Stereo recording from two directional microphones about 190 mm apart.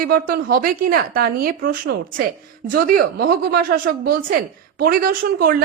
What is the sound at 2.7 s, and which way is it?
Speech, 50° right (ahead or behind).